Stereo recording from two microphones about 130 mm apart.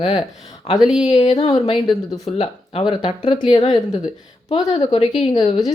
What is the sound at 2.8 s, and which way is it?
Speech, 35° left (ahead or behind).